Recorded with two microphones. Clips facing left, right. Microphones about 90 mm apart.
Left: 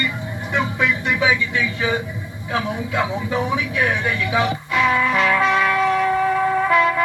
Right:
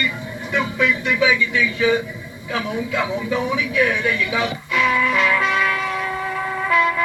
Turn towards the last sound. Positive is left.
turn(degrees=35)  # may be behind; listen again after turning